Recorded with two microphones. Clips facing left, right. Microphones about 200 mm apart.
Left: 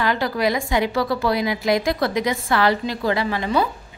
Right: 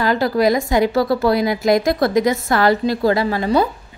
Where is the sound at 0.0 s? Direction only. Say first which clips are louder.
Right 5 dB; 40° right (ahead or behind).